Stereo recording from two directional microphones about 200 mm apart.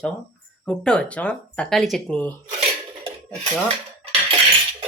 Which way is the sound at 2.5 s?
30° right (ahead or behind).